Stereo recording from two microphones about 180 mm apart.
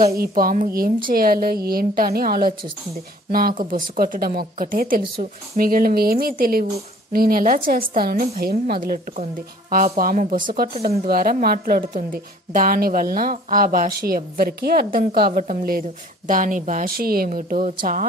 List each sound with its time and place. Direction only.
0.0 s a woman's voice: 55° right (ahead or behind)